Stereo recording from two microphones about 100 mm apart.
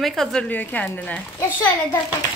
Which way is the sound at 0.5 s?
15° left (ahead or behind).